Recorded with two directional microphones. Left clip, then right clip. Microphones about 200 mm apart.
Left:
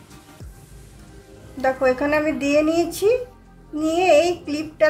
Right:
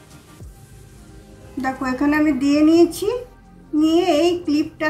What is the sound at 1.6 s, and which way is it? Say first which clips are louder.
Speech: left 3 dB; 25° left (ahead or behind).